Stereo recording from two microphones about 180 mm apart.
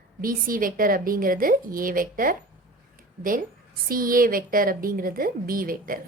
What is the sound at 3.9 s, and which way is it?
A woman's voice, 50° right (ahead or behind).